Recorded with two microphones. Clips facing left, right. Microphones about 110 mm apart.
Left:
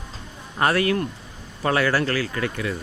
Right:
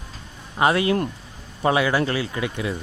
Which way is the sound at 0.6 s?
20° right (ahead or behind).